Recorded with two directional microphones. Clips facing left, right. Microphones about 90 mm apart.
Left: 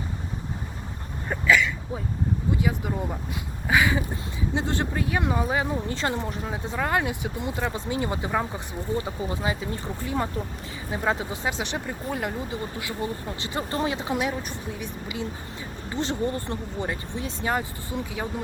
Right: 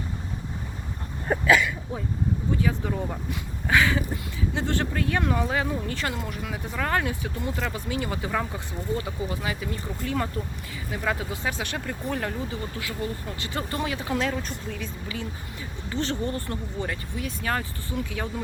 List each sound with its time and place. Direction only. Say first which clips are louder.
1.3 s a sound: right 5 dB; 10° right (ahead or behind)
2.6 s speech: even; 15° left (ahead or behind)
6.7 s speech: left 1 dB; 15° left (ahead or behind)
15.9 s speech: left 1 dB; 20° left (ahead or behind)